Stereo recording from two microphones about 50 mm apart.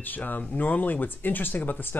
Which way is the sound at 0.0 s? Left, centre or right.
Left.